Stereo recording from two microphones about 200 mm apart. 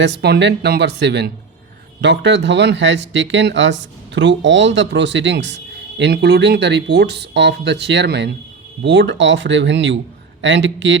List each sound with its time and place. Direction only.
0.0 s speech: 60° right (ahead or behind)